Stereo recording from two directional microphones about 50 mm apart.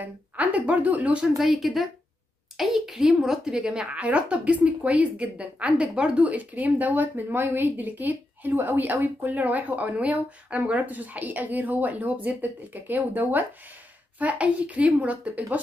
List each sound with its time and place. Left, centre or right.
0.0 s speech: right
1.3 s a woman's voice: centre
3.9 s speech: right